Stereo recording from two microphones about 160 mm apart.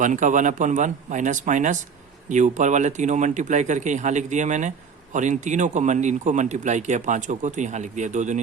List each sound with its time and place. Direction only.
0.0 s speech: 50° right (ahead or behind)